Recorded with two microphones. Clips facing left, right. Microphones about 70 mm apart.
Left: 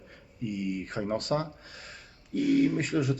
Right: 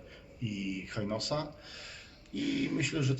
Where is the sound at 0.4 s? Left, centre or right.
Left.